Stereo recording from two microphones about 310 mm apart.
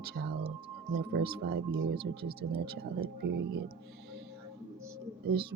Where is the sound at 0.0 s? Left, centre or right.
Right.